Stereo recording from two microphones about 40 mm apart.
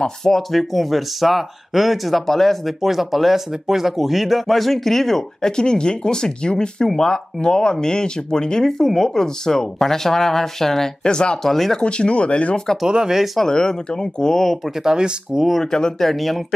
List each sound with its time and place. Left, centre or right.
0.0 s speech: centre
2.8 s speech: centre
5.6 s speech: left
11.1 s speech: left
11.4 s speech: centre
11.8 s speech: left
12.8 s speech: centre
13.4 s speech: centre
14.8 s speech: centre
15.6 s speech: centre